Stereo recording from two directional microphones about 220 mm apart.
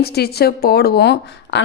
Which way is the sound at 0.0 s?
45° left (ahead or behind).